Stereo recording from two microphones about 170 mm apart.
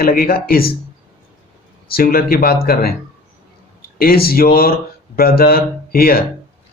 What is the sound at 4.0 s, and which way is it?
A man's voice, 60° left (ahead or behind).